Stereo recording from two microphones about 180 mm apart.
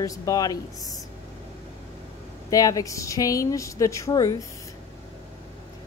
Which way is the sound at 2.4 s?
20° left (ahead or behind).